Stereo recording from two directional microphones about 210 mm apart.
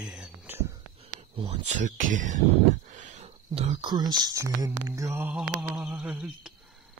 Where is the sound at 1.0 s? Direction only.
25° right (ahead or behind).